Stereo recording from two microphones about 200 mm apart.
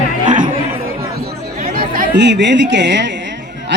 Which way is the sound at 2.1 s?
60° right (ahead or behind).